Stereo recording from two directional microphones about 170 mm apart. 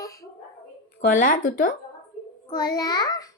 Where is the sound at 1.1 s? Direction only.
50° left (ahead or behind).